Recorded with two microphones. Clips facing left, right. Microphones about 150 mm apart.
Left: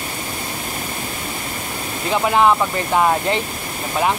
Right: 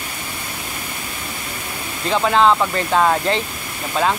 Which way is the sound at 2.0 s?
15° left (ahead or behind).